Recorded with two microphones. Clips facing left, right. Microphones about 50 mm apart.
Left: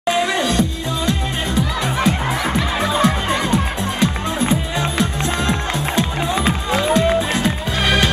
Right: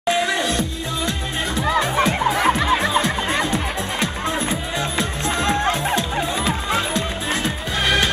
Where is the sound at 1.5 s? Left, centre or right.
Right.